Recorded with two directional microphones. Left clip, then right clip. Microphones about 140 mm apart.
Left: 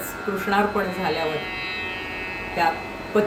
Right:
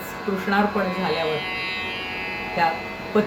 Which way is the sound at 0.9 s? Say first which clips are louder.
Right 1 dB; 20° right (ahead or behind).